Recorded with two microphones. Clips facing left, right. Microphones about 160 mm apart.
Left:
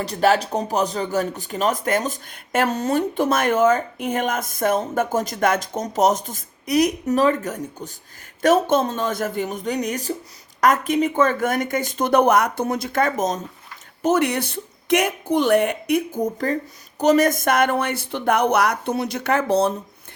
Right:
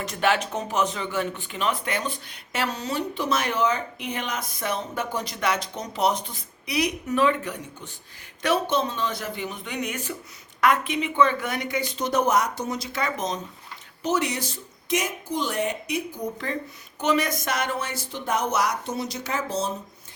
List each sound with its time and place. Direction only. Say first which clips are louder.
0.0 s speech: left 5 dB; 35° left (ahead or behind); by 19.7 s 60° left (ahead or behind)